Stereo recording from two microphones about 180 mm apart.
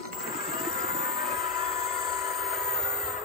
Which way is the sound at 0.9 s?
Centre (ahead or behind).